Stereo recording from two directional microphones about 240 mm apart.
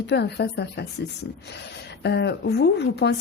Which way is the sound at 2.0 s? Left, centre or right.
Left.